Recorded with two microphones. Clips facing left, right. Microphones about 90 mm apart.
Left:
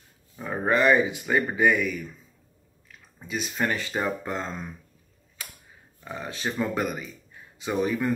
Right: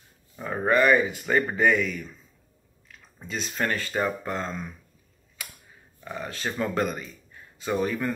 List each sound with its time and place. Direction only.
0.7 s speech: 20° left (ahead or behind)
3.2 s speech: 10° left (ahead or behind)
6.0 s speech: 20° left (ahead or behind)